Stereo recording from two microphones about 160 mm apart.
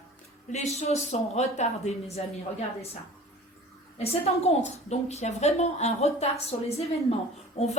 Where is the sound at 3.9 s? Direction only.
40° left (ahead or behind).